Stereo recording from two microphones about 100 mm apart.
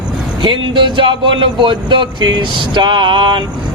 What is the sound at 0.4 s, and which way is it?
Speech, 55° right (ahead or behind).